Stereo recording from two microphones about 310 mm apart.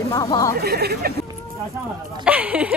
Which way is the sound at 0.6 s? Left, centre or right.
Right.